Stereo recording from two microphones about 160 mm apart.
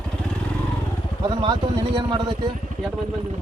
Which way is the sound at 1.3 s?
30° right (ahead or behind).